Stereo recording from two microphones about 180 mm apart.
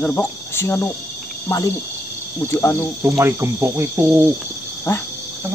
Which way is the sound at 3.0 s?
15° right (ahead or behind).